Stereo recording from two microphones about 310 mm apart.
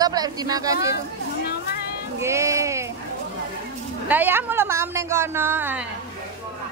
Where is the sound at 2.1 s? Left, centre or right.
Centre.